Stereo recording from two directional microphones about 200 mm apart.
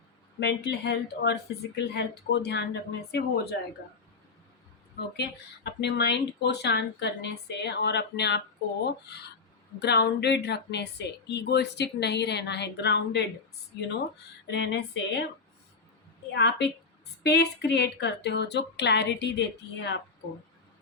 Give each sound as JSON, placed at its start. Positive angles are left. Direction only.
{"t": 0.3, "sound": "speech", "side_deg": 55}
{"t": 5.1, "sound": "speech", "side_deg": 55}
{"t": 14.4, "sound": "speech", "side_deg": 60}
{"t": 16.3, "sound": "speech", "side_deg": 60}